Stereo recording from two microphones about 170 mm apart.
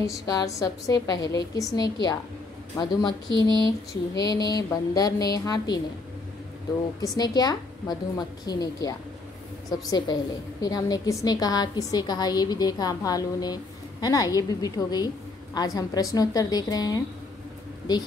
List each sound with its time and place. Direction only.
0.0 s a woman's voice: 20° left (ahead or behind)
3.3 s a sound: 25° right (ahead or behind)
4.1 s a woman's voice: 20° left (ahead or behind)
7.0 s a woman's voice: 25° left (ahead or behind)